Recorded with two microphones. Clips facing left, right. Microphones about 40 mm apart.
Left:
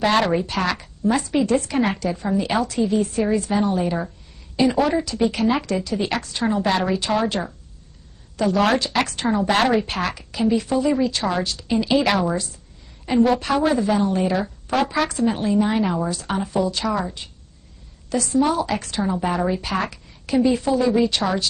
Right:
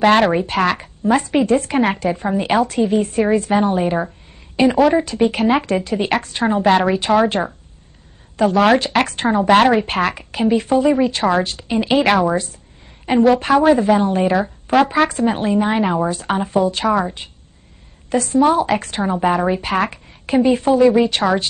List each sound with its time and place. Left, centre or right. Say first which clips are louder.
0.0 s speech: right 5 dB; right
13.5 s a woman's voice: right 6 dB; right